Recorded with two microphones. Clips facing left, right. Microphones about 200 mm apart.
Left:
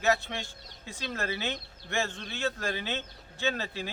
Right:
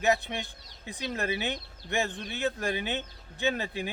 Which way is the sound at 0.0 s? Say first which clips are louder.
Right 1 dB; 15° right (ahead or behind).